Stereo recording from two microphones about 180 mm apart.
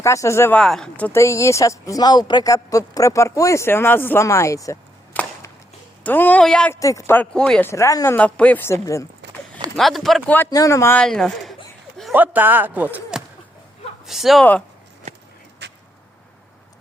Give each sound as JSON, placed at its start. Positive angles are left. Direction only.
{"t": 0.0, "sound": "speech", "side_deg": 15}
{"t": 0.6, "sound": "speech", "side_deg": 5}
{"t": 6.7, "sound": "speech", "side_deg": 15}
{"t": 9.7, "sound": "speech", "side_deg": 0}
{"t": 12.1, "sound": "speech", "side_deg": -10}
{"t": 15.6, "sound": "vehicle", "side_deg": -70}